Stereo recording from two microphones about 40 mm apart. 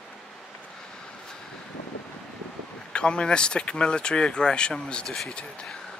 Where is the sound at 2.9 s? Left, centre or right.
Left.